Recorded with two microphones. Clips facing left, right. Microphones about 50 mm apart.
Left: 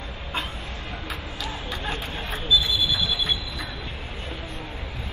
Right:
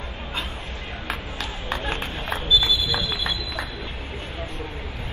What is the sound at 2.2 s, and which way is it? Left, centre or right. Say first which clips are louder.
Train: right 2 dB; right.